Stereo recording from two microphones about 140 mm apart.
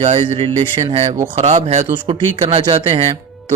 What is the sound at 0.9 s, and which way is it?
Speech, 50° right (ahead or behind).